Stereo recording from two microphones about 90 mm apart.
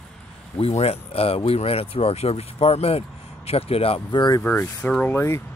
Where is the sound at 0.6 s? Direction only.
90° left.